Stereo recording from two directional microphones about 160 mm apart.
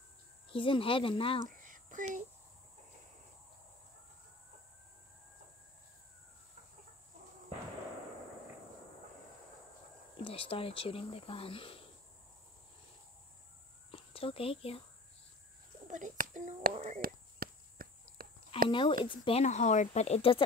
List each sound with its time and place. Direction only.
0.5 s speech: 35° left (ahead or behind)
1.6 s a sound: 55° right (ahead or behind)
10.1 s speech: 35° left (ahead or behind)
13.9 s speech: 35° left (ahead or behind)
15.9 s speech: 50° right (ahead or behind)
17.0 s a sound: 65° right (ahead or behind)
18.7 s speech: 30° left (ahead or behind)
19.4 s speech: 45° left (ahead or behind)